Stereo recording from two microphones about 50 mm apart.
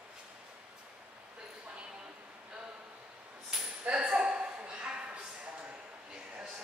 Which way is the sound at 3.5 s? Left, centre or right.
Right.